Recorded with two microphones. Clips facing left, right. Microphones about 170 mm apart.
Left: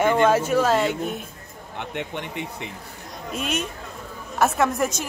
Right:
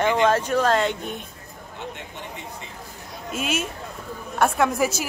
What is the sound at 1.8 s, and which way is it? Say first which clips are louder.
Speech: left 6 dB; 65° left (ahead or behind).